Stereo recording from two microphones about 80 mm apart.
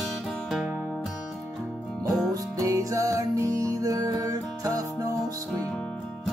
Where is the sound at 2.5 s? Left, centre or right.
Right.